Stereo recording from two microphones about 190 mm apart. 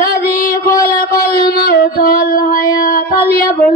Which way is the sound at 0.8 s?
50° left (ahead or behind).